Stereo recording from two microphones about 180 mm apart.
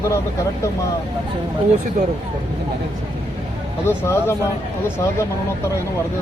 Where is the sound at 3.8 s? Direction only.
15° left (ahead or behind).